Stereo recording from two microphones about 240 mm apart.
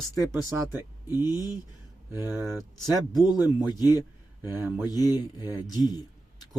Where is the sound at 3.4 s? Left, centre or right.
Centre.